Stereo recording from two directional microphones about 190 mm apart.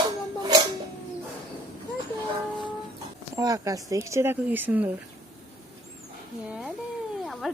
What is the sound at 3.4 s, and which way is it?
Speech, 20° right (ahead or behind).